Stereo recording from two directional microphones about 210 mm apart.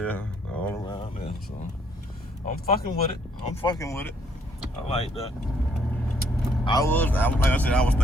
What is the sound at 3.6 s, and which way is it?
Speech, 15° left (ahead or behind).